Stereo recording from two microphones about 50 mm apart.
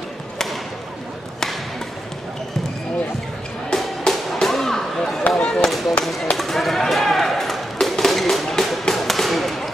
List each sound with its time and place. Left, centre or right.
3.7 s music: centre
5.4 s chop: centre
5.7 s a sound: centre